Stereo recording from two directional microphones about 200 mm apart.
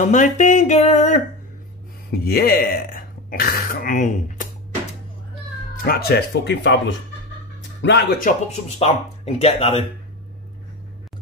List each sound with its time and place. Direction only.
0.0 s speech: 40° left (ahead or behind)
2.0 s speech: 50° left (ahead or behind)
5.8 s speech: 50° left (ahead or behind)
8.2 s speech: 40° left (ahead or behind)